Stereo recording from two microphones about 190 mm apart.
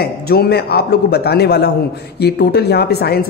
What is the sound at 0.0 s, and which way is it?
Speech, 55° left (ahead or behind).